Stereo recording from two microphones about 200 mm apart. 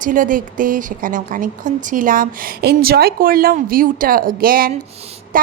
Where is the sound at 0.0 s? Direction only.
40° right (ahead or behind).